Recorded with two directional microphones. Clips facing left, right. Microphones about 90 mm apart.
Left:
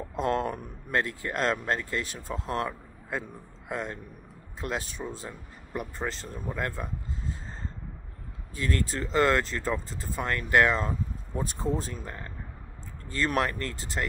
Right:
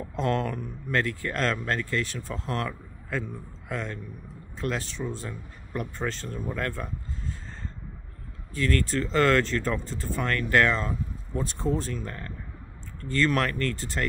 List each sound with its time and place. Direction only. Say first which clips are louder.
0.2 s speech: even; 20° left (ahead or behind)
2.0 s speech: right 2 dB; 35° left (ahead or behind)
3.1 s a man's voice: right 2 dB; 15° left (ahead or behind)
8.5 s speech: right 4 dB; 15° left (ahead or behind)
10.3 s speech: even; 15° left (ahead or behind)
11.3 s speech: right 2 dB; 5° left (ahead or behind)
12.0 s speech: right 3 dB; 20° left (ahead or behind)